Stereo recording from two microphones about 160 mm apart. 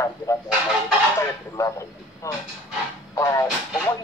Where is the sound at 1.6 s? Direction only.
20° left (ahead or behind).